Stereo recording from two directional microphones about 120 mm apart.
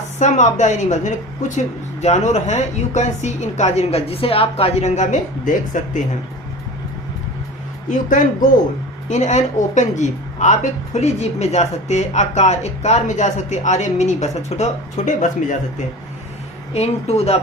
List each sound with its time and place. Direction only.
0.2 s a woman's voice: 90° left
9.0 s a woman's voice: 75° left (ahead or behind)
16.7 s speech: 60° left (ahead or behind)